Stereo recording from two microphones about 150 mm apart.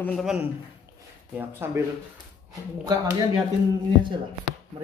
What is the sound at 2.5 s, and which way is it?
Speech, 25° right (ahead or behind).